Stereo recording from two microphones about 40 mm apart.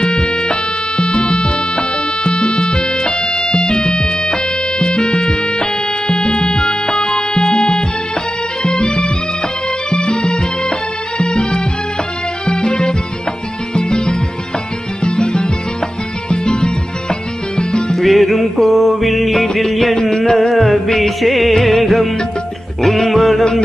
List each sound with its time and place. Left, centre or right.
0.0 s music: left
17.9 s music: centre